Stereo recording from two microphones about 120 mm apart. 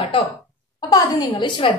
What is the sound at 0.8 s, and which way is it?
Speech, 35° left (ahead or behind).